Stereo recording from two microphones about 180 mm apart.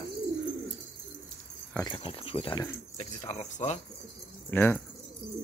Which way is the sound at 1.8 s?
30° left (ahead or behind).